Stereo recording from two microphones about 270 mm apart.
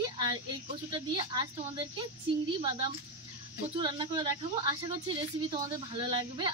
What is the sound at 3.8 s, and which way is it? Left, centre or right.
A woman's voice, centre.